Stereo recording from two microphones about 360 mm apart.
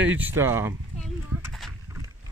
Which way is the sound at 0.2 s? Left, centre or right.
Centre.